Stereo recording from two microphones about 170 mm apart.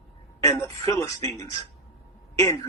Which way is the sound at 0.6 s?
20° left (ahead or behind).